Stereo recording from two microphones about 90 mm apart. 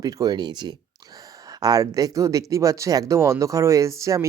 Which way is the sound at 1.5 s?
40° right (ahead or behind).